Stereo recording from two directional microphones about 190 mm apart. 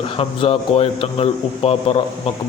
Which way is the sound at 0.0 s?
30° left (ahead or behind).